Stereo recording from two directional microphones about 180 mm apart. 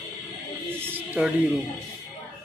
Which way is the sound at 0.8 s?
10° right (ahead or behind).